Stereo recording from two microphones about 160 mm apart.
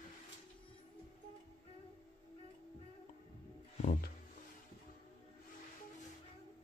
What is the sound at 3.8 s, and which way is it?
Music, 55° left (ahead or behind).